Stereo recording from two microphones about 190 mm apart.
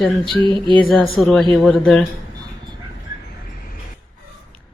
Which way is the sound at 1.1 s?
Centre (ahead or behind).